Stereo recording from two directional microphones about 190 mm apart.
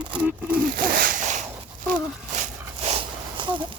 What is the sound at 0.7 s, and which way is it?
Hoot, 45° right (ahead or behind).